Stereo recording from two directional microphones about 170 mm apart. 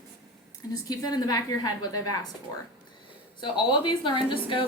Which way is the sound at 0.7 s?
25° left (ahead or behind).